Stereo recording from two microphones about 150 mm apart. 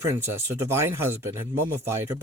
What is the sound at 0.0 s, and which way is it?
Speech, 20° right (ahead or behind).